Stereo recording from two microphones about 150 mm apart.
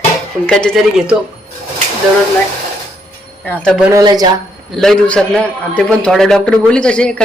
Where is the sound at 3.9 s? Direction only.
25° right (ahead or behind).